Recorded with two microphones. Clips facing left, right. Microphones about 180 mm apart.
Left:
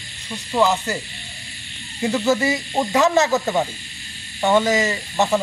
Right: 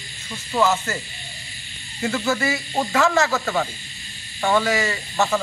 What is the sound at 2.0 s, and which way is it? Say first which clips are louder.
Speech: left 4 dB; 20° left (ahead or behind).